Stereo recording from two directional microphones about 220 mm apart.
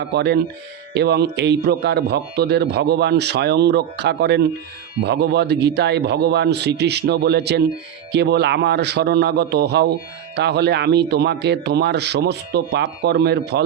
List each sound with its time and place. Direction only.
0.1 s a man's voice: 50° right (ahead or behind)